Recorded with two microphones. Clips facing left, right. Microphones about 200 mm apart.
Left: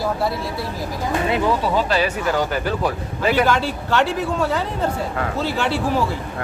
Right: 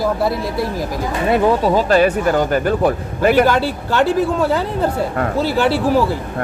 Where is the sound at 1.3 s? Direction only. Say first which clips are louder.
Right 7 dB; 45° right (ahead or behind).